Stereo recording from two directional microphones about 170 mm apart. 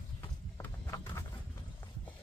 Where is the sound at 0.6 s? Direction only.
20° left (ahead or behind).